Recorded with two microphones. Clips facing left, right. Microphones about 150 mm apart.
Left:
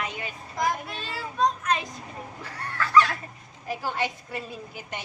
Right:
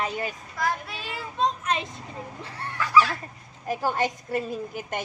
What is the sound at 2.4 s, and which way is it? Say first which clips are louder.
Speech: right 1 dB; 30° right (ahead or behind).